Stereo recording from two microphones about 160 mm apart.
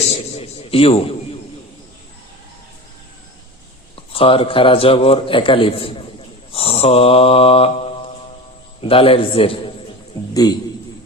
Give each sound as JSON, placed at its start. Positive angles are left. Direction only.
{"t": 0.1, "sound": "a man's voice", "side_deg": 40}
{"t": 3.9, "sound": "a man's voice", "side_deg": 35}